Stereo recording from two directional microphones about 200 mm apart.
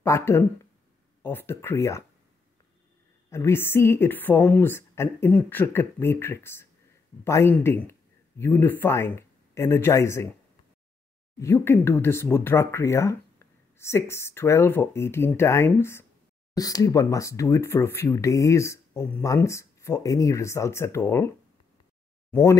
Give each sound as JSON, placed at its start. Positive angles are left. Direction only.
{"t": 0.0, "sound": "speech", "side_deg": 15}
{"t": 3.3, "sound": "speech", "side_deg": 10}
{"t": 11.3, "sound": "speech", "side_deg": 15}
{"t": 22.3, "sound": "speech", "side_deg": 15}